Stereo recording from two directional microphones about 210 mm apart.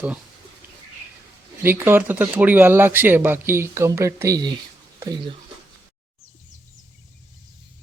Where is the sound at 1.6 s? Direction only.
10° right (ahead or behind).